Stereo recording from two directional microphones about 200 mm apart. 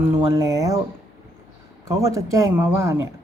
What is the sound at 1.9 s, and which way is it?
Speech, 15° right (ahead or behind).